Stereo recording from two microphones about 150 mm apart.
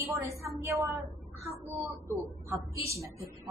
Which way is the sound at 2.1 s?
15° left (ahead or behind).